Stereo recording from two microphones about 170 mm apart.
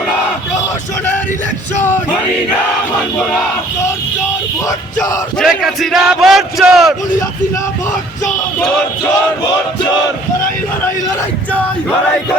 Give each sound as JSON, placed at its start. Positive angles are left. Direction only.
{"t": 4.9, "sound": "music", "side_deg": 20}
{"t": 5.4, "sound": "speech", "side_deg": 0}